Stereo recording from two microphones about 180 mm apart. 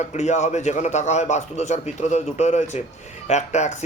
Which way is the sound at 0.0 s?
40° left (ahead or behind).